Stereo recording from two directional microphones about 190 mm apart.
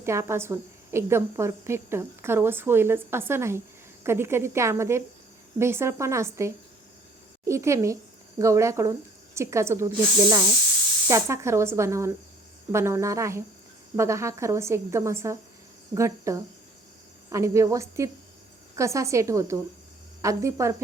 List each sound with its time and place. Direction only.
0.0 s a woman's voice: 15° right (ahead or behind)